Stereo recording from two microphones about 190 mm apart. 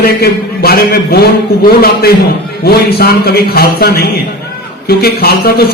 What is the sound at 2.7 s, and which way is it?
A man's voice, 55° left (ahead or behind).